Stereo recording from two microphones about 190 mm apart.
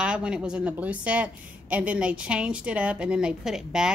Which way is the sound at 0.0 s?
5° right (ahead or behind).